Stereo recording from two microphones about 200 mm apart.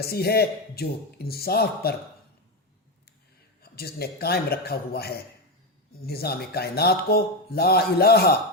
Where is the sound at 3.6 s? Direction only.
50° left (ahead or behind).